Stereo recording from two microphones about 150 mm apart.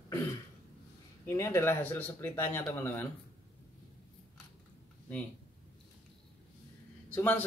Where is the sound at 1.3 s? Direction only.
15° left (ahead or behind).